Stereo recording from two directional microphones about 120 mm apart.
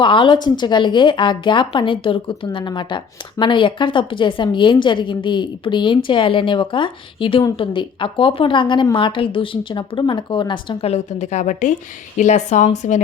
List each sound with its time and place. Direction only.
0.0 s a woman's voice: 45° left (ahead or behind)
10.8 s a woman's voice: 70° left (ahead or behind)